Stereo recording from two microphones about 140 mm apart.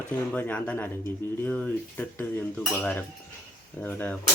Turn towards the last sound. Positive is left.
turn(degrees=15)  # may be behind; listen again after turning